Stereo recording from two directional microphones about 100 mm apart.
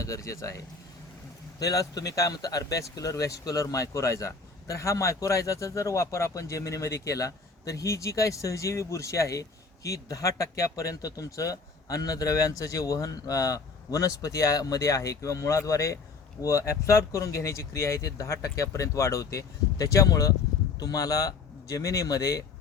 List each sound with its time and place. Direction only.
0.0 s speech: 30° left (ahead or behind)